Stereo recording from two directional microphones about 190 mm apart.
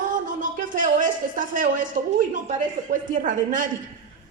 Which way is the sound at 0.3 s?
45° right (ahead or behind).